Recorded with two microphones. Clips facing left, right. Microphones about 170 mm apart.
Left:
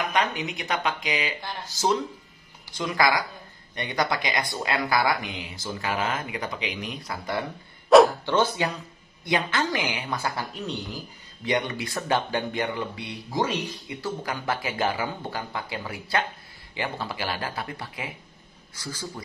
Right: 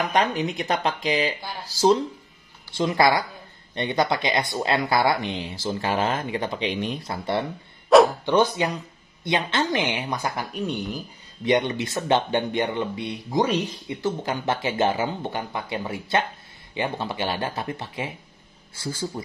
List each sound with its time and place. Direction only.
0.0 s speech: 35° right (ahead or behind)
7.9 s bow-wow: centre (ahead or behind)
8.3 s speech: 20° right (ahead or behind)